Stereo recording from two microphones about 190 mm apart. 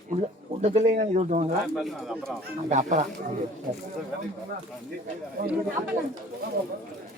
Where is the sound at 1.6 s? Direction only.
Centre (ahead or behind).